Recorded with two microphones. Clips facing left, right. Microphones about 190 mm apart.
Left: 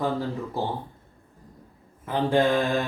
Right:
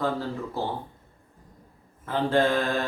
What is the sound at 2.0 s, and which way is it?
Speech, 15° left (ahead or behind).